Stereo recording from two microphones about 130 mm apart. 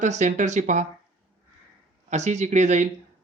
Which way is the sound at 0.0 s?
65° right (ahead or behind).